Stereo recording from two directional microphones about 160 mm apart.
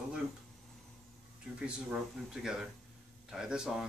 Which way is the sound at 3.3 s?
5° right (ahead or behind).